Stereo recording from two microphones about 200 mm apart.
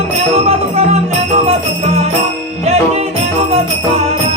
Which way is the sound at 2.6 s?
30° right (ahead or behind).